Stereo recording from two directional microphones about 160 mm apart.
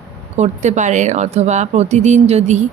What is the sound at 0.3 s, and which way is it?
A woman's voice, 45° right (ahead or behind).